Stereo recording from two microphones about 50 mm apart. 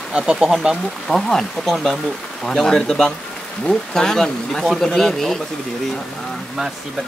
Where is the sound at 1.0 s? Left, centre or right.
Centre.